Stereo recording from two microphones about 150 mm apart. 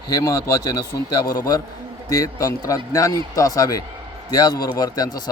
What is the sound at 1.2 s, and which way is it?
Speech, 80° left.